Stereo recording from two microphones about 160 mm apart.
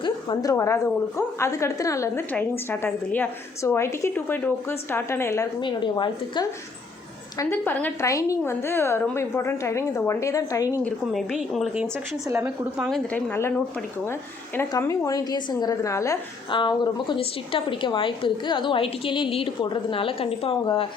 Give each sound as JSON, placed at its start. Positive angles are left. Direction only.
{"t": 0.0, "sound": "a sound", "side_deg": 25}
{"t": 0.5, "sound": "a woman's voice", "side_deg": 20}
{"t": 5.5, "sound": "a woman's voice", "side_deg": 30}
{"t": 7.3, "sound": "a woman's voice", "side_deg": 10}
{"t": 10.8, "sound": "a woman's voice", "side_deg": 0}
{"t": 13.1, "sound": "a woman's voice", "side_deg": 15}